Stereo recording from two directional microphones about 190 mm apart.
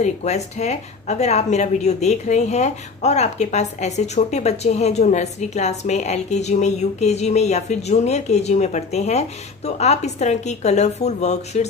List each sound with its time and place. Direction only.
0.0 s a woman's voice: 35° left (ahead or behind)